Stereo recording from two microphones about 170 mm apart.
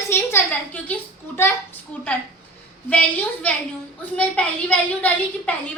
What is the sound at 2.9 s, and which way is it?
A woman's voice, 10° left (ahead or behind).